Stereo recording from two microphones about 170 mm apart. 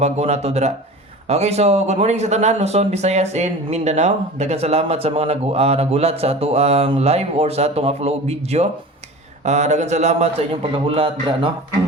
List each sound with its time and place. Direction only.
0.0 s speech: 40° right (ahead or behind)